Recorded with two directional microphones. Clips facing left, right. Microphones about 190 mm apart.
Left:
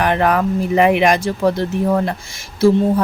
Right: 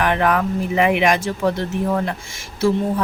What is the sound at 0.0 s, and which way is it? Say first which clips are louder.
Speech: left 2 dB; 40° left (ahead or behind).